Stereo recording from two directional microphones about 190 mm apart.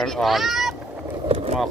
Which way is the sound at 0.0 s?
Centre (ahead or behind).